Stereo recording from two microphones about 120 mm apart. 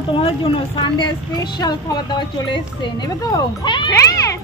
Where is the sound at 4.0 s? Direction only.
25° left (ahead or behind).